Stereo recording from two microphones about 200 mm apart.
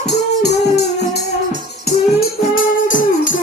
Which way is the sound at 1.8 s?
45° left (ahead or behind).